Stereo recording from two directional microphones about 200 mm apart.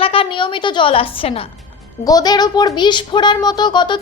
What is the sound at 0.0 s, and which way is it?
A woman's voice, 25° left (ahead or behind).